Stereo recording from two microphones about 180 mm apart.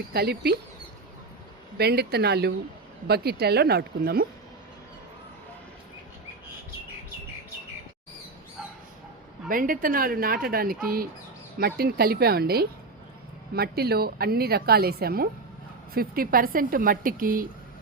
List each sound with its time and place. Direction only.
0.1 s a woman's voice: 60° right (ahead or behind)
1.8 s a woman's voice: 65° right (ahead or behind)
9.5 s a woman's voice: 50° right (ahead or behind)